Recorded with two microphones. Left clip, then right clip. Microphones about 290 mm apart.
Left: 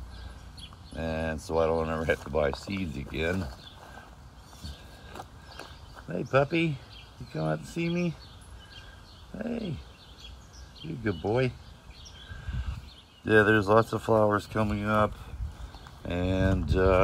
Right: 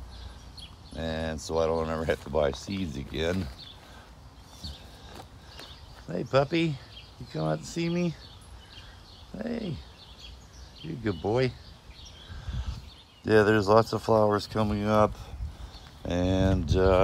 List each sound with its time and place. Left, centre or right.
0.6 s a sound: centre
1.5 s speech: centre
6.0 s speech: centre
9.4 s speech: centre
10.8 s speech: centre
13.2 s speech: centre